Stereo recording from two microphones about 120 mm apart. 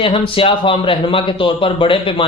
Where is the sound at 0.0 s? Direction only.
50° left (ahead or behind).